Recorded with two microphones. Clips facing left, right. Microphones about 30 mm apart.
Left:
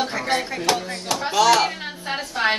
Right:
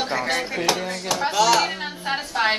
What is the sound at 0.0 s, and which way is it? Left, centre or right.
Music, centre.